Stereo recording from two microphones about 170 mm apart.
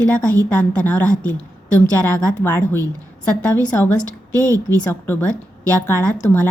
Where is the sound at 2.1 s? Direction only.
15° left (ahead or behind).